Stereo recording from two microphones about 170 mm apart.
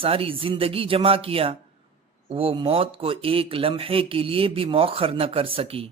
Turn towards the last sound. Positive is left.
turn(degrees=-35)  # may be behind; listen again after turning